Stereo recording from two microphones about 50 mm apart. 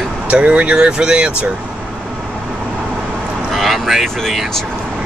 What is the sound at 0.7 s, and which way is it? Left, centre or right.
Speech, centre.